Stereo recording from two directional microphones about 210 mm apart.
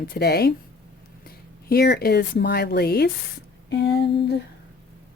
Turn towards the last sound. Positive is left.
turn(degrees=50)  # may be behind; listen again after turning